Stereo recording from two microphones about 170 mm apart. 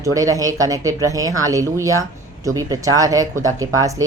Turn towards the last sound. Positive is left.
turn(degrees=-20)  # may be behind; listen again after turning